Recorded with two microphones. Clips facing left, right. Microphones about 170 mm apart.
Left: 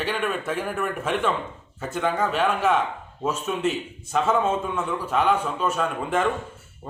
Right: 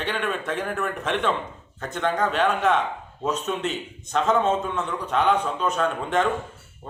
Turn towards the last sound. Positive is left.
turn(degrees=5)  # may be behind; listen again after turning